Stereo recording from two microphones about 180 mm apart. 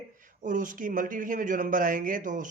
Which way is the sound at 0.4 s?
45° right (ahead or behind).